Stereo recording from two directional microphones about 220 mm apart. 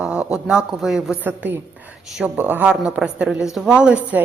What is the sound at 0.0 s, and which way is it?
A woman's voice, 5° right (ahead or behind).